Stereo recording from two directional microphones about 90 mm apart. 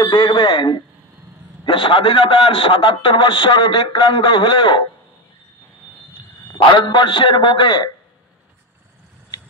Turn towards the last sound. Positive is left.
turn(degrees=55)  # may be behind; listen again after turning